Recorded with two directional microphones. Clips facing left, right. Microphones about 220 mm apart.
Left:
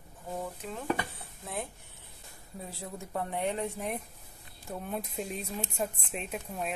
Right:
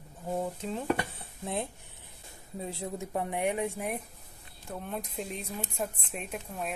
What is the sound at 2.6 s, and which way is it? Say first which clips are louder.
Speech: right 5 dB; 20° right (ahead or behind).